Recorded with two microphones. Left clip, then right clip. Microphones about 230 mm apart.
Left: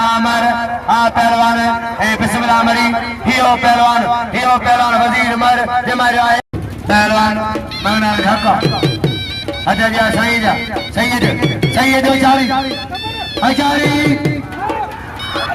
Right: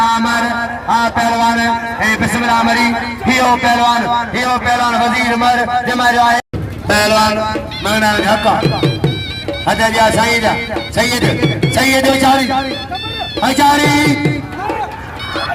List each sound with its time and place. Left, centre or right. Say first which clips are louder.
0.0 s music: even; left
1.0 s a sound: left 3 dB; left
6.8 s speech: even; centre
8.6 s music: even; left
9.6 s speech: right 2 dB; centre
11.3 s music: right 1 dB; left
11.8 s speech: even; centre